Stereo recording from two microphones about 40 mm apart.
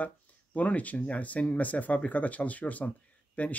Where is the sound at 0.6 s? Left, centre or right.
Left.